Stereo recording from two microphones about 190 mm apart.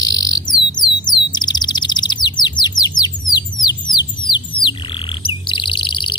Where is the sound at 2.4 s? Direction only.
20° left (ahead or behind).